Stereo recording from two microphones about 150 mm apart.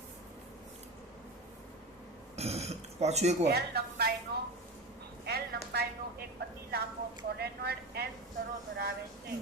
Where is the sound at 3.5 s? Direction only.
90° right.